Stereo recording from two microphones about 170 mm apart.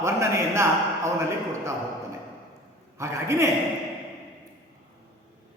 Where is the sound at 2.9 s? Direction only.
15° right (ahead or behind).